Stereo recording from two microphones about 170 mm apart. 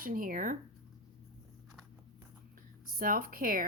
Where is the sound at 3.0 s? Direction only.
55° right (ahead or behind).